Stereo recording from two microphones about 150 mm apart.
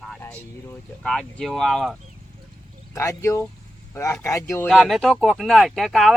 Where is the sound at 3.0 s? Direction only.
20° left (ahead or behind).